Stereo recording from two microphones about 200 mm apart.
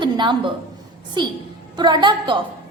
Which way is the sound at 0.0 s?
25° right (ahead or behind).